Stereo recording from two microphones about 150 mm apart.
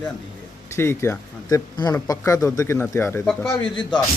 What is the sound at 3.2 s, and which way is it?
Speech, 5° left (ahead or behind).